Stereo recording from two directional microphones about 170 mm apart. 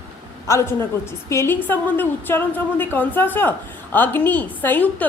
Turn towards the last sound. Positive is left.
turn(degrees=10)  # may be behind; listen again after turning